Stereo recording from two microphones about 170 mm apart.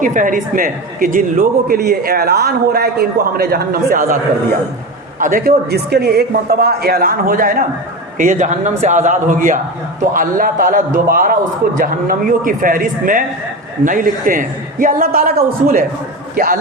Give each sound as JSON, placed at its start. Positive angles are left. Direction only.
{"t": 0.0, "sound": "a man's voice", "side_deg": -50}
{"t": 5.2, "sound": "a man's voice", "side_deg": -55}
{"t": 16.3, "sound": "a man's voice", "side_deg": -55}